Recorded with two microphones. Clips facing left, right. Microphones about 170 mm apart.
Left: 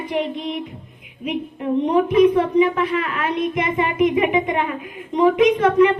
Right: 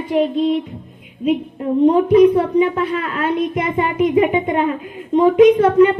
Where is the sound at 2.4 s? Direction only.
30° right (ahead or behind).